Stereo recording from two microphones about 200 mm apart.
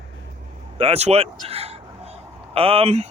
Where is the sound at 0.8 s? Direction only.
30° right (ahead or behind).